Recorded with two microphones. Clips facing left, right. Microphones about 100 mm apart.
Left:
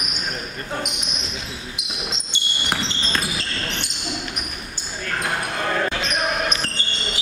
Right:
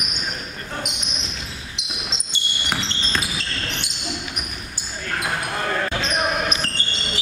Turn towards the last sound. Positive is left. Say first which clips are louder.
# even
turn(degrees=0)  # may be behind; listen again after turning